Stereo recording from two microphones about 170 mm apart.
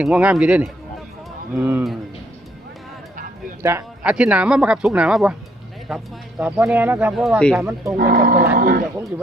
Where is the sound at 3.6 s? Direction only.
15° right (ahead or behind).